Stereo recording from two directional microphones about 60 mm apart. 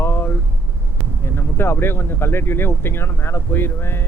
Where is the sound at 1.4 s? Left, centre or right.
Left.